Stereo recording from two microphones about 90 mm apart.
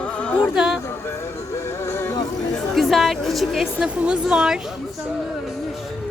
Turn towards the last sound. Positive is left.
turn(degrees=-10)  # may be behind; listen again after turning